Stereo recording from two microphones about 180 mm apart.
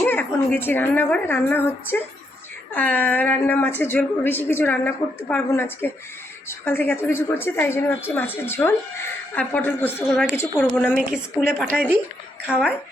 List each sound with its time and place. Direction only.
0.0 s a woman's voice: 10° left (ahead or behind)
10.9 s speech: 5° right (ahead or behind)